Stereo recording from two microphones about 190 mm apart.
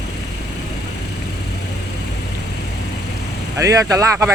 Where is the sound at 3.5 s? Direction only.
15° right (ahead or behind).